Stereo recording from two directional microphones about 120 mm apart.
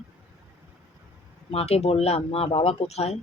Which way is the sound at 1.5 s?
60° left (ahead or behind).